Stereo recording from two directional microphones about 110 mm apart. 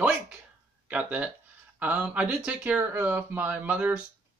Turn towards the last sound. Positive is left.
turn(degrees=-15)  # may be behind; listen again after turning